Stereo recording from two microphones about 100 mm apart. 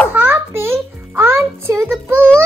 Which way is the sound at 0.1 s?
25° right (ahead or behind).